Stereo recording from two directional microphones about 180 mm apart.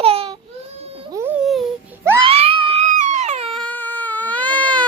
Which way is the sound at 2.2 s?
30° right (ahead or behind).